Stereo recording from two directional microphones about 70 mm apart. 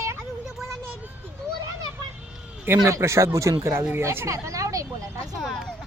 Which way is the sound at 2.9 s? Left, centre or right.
Right.